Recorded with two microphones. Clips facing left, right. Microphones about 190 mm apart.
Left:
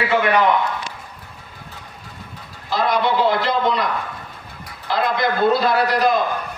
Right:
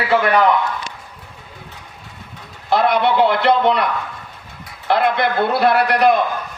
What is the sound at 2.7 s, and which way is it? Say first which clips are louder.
A man's voice: right 4 dB; 60° right (ahead or behind).